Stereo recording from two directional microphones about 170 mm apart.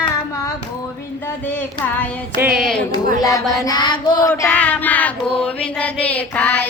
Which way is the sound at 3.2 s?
20° left (ahead or behind).